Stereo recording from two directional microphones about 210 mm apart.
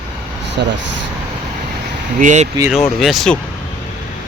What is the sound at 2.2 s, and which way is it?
Speech, 35° right (ahead or behind).